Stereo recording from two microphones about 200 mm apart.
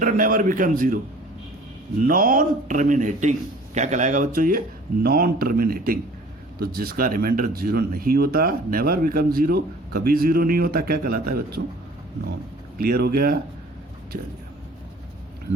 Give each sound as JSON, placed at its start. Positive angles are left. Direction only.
{"t": 0.0, "sound": "a man's voice", "side_deg": -40}
{"t": 2.0, "sound": "a man's voice", "side_deg": -45}
{"t": 12.8, "sound": "speech", "side_deg": -50}